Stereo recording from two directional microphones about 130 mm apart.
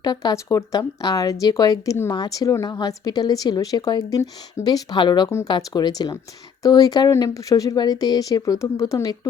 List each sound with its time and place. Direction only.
0.0 s speech: 30° left (ahead or behind)